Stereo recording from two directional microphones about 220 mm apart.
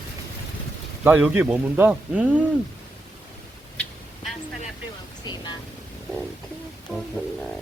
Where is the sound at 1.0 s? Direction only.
10° right (ahead or behind).